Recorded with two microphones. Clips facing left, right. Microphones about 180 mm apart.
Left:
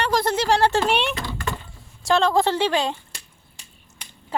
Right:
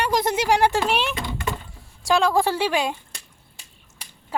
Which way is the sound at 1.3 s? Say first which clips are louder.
Right 1 dB; 20° right (ahead or behind).